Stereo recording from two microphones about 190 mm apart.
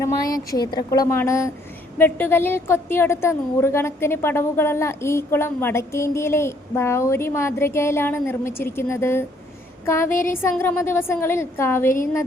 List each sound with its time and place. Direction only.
0.0 s a woman's voice: 20° left (ahead or behind)
10.1 s a sound: 45° left (ahead or behind)
10.5 s a woman's voice: 10° left (ahead or behind)